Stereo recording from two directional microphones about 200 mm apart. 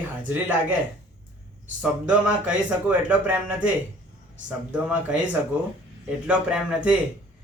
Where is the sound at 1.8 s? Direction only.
5° right (ahead or behind).